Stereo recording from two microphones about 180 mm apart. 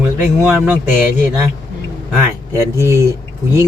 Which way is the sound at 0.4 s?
5° right (ahead or behind).